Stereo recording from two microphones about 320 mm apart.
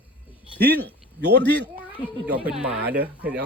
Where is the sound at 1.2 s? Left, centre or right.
Right.